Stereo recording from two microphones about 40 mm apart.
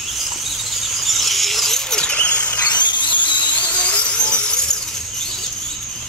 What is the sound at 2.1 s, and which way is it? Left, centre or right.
Squeal, left.